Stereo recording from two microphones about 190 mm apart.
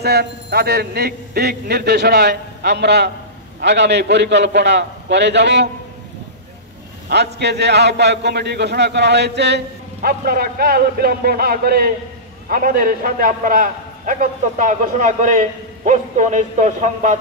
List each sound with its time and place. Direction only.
0.0 s speech: 60° right (ahead or behind)
7.3 s a man's voice: 60° right (ahead or behind); by 17.2 s 40° right (ahead or behind)